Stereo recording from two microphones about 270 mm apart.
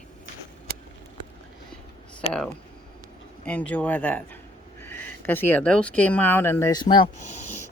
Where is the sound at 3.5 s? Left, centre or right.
Centre.